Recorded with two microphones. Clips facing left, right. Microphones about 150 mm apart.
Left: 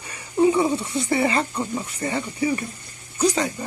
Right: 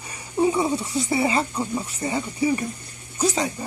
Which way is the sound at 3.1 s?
5° right (ahead or behind).